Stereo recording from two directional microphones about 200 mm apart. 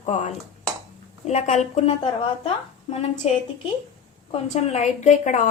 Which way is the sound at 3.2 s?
30° left (ahead or behind).